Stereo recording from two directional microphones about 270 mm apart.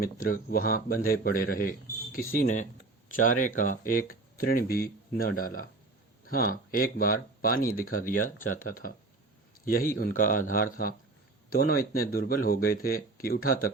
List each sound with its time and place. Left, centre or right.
0.0 s speech: left